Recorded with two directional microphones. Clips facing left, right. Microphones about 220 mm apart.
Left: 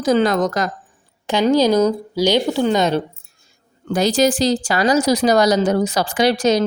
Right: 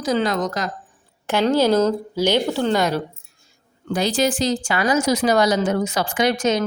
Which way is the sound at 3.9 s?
45° left (ahead or behind).